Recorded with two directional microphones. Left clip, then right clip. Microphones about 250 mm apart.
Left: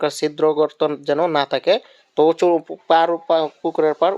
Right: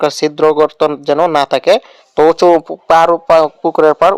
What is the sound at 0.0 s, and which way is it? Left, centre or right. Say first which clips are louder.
Speech: right 7 dB; centre.